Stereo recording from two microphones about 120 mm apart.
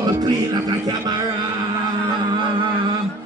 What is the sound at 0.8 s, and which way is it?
Speech, 30° right (ahead or behind).